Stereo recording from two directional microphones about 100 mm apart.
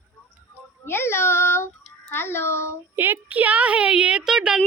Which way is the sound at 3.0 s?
20° right (ahead or behind).